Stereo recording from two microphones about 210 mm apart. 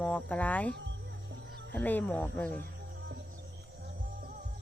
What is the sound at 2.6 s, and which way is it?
Cricket, 55° right (ahead or behind).